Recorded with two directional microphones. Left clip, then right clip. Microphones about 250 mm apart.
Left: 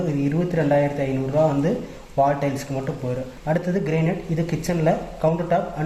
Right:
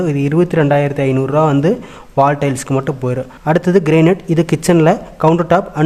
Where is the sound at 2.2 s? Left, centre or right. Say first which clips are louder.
Right 7 dB; right.